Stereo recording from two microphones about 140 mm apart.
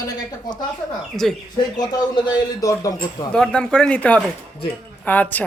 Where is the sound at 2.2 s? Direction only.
30° left (ahead or behind).